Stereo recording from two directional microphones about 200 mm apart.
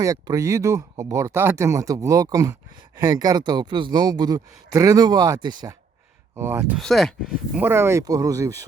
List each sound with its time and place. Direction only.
0.0 s speech: 15° right (ahead or behind)
6.7 s speech: centre (ahead or behind); by 8.5 s 15° right (ahead or behind)